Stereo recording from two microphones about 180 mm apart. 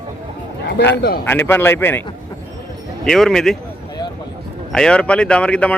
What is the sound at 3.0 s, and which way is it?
Speech, centre (ahead or behind).